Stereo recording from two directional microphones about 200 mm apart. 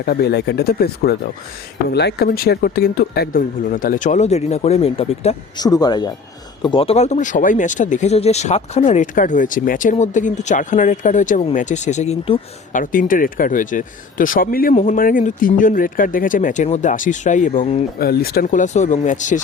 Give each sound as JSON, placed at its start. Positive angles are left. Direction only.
{"t": 0.0, "sound": "speech", "side_deg": 50}
{"t": 5.5, "sound": "speech", "side_deg": 20}
{"t": 12.7, "sound": "speech", "side_deg": 45}
{"t": 18.0, "sound": "speech", "side_deg": 50}